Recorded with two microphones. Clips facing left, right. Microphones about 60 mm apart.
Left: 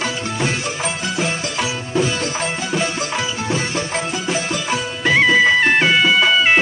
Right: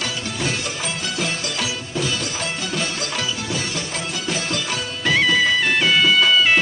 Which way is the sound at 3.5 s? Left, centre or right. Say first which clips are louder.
Left 5 dB; left.